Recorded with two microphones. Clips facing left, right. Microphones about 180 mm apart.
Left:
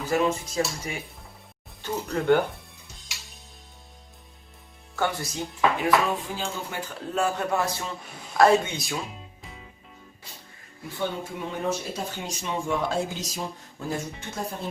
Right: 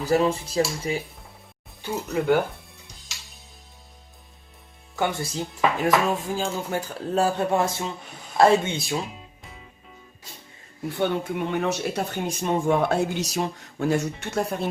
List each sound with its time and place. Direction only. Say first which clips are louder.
0.0 s speech: right 3 dB; 35° right (ahead or behind)
1.8 s speech: right 2 dB; 5° right (ahead or behind)
4.9 s speech: right 2 dB; 25° right (ahead or behind)
5.8 s speech: right 2 dB; 45° right (ahead or behind); by 9.0 s 25° right (ahead or behind)
9.4 s music: left 1 dB; centre (ahead or behind)
10.8 s speech: right 6 dB; 65° right (ahead or behind)
13.1 s speech: right 7 dB; 75° right (ahead or behind)